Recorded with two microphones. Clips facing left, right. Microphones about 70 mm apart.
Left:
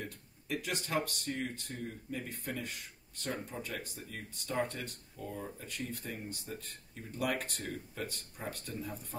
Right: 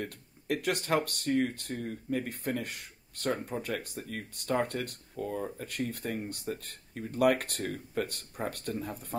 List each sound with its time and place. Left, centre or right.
0.0 s speech: right